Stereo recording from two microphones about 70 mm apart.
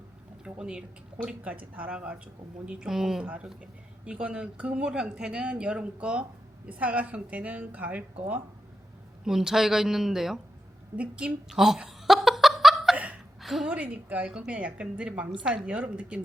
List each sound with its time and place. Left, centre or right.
0.4 s a woman's voice: centre
4.0 s a woman's voice: centre
9.2 s a woman's voice: centre
10.9 s a woman's voice: centre
11.4 s chuckle: centre
13.4 s a sound: centre
13.7 s a woman's voice: centre